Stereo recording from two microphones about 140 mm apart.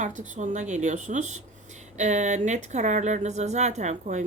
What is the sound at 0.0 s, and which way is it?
Speech, 60° right (ahead or behind).